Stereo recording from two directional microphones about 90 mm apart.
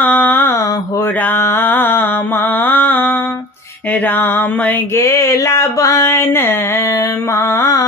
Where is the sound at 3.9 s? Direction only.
20° left (ahead or behind).